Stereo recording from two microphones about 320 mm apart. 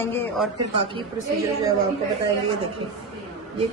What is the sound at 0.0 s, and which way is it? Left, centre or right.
Speech, centre.